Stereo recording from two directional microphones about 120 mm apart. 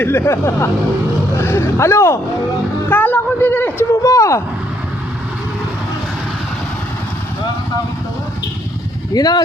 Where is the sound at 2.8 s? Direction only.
15° left (ahead or behind).